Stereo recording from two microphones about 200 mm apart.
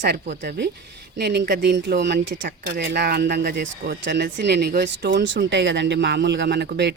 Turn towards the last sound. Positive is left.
turn(degrees=-55)  # may be behind; listen again after turning